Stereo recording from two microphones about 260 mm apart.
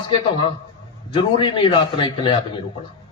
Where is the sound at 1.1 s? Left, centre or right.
Centre.